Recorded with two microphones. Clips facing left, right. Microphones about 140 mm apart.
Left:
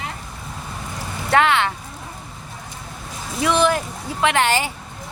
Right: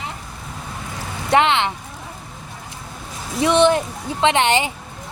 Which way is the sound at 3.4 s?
25° right (ahead or behind).